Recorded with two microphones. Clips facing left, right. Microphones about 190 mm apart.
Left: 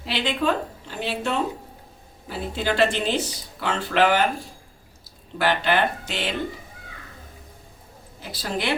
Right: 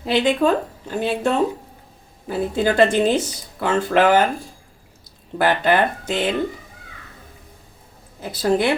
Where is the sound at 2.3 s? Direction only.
50° right (ahead or behind).